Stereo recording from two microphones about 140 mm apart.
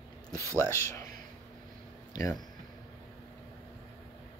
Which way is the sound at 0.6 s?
20° left (ahead or behind).